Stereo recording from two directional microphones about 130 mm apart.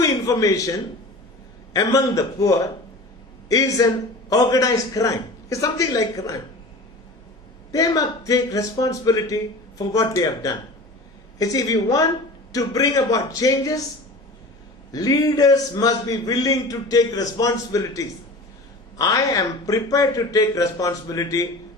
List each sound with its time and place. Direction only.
0.0 s a man's voice: 25° left (ahead or behind)
7.7 s a man's voice: 25° left (ahead or behind)
14.9 s a man's voice: 30° left (ahead or behind)